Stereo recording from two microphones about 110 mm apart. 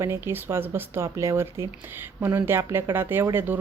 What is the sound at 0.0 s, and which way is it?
A woman's voice, 20° right (ahead or behind).